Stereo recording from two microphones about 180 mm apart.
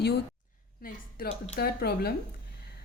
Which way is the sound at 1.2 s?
55° left (ahead or behind).